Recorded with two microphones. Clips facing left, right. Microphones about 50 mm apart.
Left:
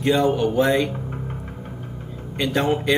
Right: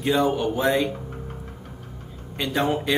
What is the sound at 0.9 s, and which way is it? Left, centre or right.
Music, left.